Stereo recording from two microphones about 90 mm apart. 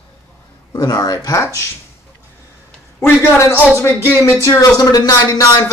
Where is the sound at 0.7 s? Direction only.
45° left (ahead or behind).